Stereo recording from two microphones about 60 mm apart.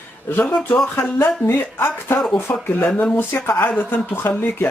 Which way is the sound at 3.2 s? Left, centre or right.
Left.